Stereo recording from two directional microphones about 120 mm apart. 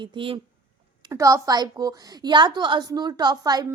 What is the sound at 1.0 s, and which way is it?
A woman's voice, 25° right (ahead or behind).